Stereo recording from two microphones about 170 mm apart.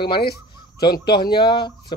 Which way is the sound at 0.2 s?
65° left (ahead or behind).